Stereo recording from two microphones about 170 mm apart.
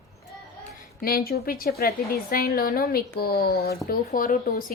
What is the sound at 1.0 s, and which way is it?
A woman's voice, 60° left (ahead or behind).